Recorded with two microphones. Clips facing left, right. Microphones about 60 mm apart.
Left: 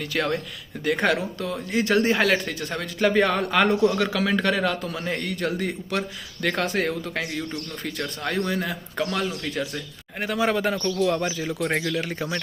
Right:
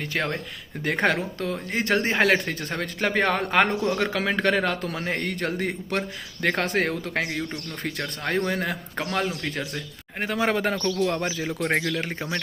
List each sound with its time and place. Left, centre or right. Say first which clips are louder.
0.0 s a man's voice: left 2 dB; right